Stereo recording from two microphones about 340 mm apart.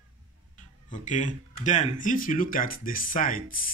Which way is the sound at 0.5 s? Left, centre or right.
Left.